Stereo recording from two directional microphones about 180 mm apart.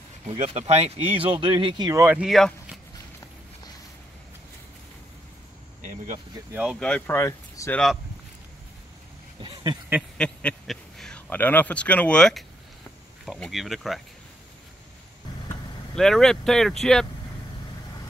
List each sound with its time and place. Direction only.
0.3 s speech: 35° right (ahead or behind); by 2.8 s centre (ahead or behind)
5.8 s a sound: 40° right (ahead or behind)
6.5 s speech: 5° right (ahead or behind)
6.8 s speech: 10° left (ahead or behind)
9.4 s a sound: 20° right (ahead or behind)
10.1 s speech: 5° left (ahead or behind)
15.9 s speech: 5° left (ahead or behind)